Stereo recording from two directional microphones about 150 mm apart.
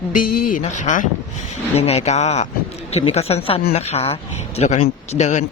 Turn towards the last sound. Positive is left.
turn(degrees=50)  # may be behind; listen again after turning